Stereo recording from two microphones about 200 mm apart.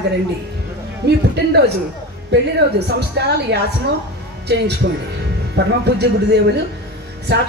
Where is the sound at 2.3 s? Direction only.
55° right (ahead or behind).